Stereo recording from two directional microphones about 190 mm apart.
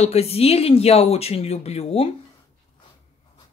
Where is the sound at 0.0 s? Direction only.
35° left (ahead or behind).